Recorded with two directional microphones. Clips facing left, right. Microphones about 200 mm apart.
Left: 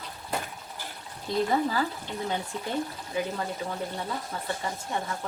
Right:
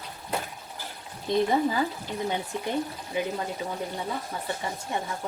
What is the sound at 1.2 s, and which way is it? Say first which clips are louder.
Speech: right 2 dB; 20° right (ahead or behind).